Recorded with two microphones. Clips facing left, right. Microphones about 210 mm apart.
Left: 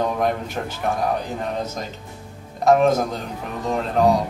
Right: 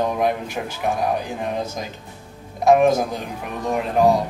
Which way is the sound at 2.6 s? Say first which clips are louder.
Right 1 dB; 10° right (ahead or behind).